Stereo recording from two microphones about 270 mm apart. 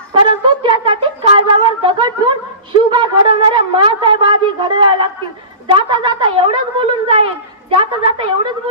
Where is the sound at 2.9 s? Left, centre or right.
Centre.